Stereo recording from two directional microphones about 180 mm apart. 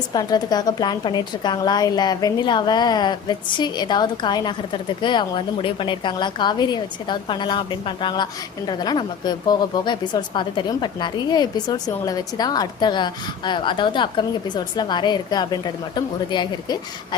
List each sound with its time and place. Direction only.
0.1 s a woman's voice: 20° left (ahead or behind)